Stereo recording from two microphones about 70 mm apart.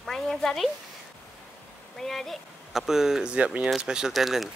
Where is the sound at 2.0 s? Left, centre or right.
Centre.